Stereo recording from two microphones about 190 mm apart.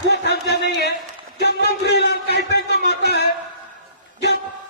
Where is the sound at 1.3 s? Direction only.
60° left (ahead or behind).